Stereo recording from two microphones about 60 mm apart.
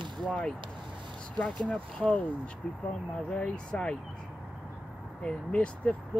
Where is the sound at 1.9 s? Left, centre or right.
Centre.